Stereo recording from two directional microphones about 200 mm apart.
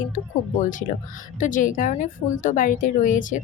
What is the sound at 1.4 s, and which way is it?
A woman's voice, 40° left (ahead or behind).